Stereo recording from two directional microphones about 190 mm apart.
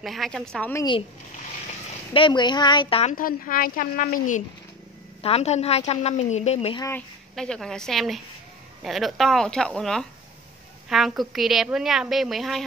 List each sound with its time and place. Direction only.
0.0 s a woman's voice: centre (ahead or behind)
2.1 s speech: 25° left (ahead or behind)
3.2 s a woman's voice: 45° left (ahead or behind)
5.2 s a woman's voice: 35° left (ahead or behind)
7.3 s a woman's voice: 5° left (ahead or behind)